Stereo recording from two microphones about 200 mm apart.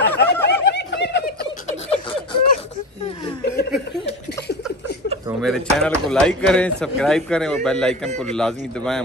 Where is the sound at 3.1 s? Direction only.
25° left (ahead or behind).